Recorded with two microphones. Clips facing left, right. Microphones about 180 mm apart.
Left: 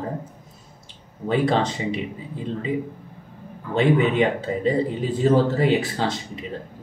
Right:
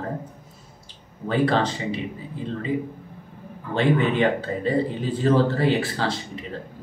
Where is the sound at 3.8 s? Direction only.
15° left (ahead or behind).